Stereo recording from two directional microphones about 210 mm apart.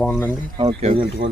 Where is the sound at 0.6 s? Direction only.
25° right (ahead or behind).